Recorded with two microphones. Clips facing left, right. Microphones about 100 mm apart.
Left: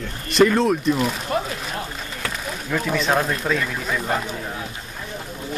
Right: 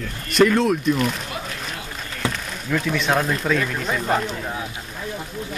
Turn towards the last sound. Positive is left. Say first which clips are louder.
# right 2 dB
turn(degrees=0)  # may be behind; listen again after turning